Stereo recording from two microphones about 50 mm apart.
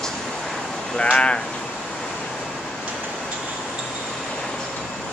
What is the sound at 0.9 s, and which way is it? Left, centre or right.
Speech, left.